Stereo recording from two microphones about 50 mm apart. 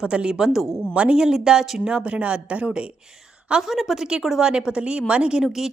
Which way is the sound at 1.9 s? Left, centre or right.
Right.